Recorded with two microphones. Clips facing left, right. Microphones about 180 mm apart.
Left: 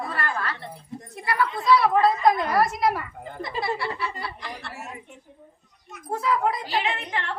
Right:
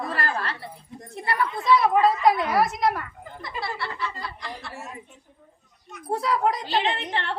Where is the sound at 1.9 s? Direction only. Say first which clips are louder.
Even; 10° right (ahead or behind); by 3.0 s 5° left (ahead or behind).